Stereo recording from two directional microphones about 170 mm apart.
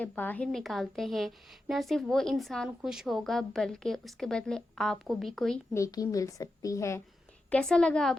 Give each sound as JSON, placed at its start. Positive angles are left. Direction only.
{"t": 0.0, "sound": "a woman's voice", "side_deg": 10}
{"t": 5.7, "sound": "a woman's voice", "side_deg": 20}
{"t": 7.5, "sound": "a woman's voice", "side_deg": 5}